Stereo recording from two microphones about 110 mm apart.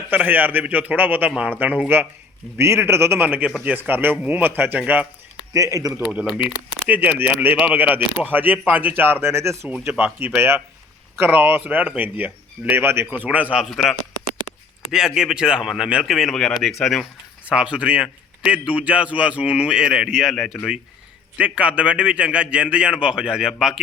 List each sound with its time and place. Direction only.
0.1 s a man's voice: 15° right (ahead or behind)
5.5 s speech: 30° right (ahead or behind)
6.3 s a man's voice: 10° right (ahead or behind)
14.9 s speech: 5° right (ahead or behind)
17.5 s a man's voice: 10° right (ahead or behind)
21.3 s a man's voice: 10° right (ahead or behind)